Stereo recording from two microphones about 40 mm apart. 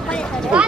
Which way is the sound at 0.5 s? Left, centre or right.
Right.